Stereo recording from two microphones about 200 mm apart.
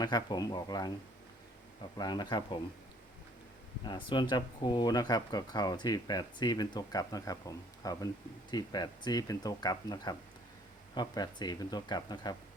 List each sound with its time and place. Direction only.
0.0 s speech: 20° left (ahead or behind)
3.8 s speech: 25° left (ahead or behind)